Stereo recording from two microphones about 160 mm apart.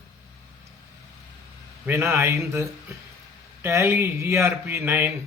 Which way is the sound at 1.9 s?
15° right (ahead or behind).